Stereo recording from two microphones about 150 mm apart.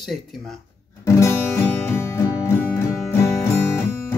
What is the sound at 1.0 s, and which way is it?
Music, 20° left (ahead or behind).